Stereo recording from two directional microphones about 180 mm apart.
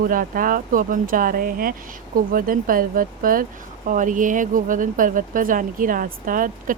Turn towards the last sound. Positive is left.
turn(degrees=-50)  # may be behind; listen again after turning